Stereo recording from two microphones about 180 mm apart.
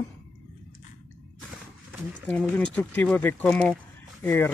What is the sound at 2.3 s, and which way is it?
Speech, 5° left (ahead or behind).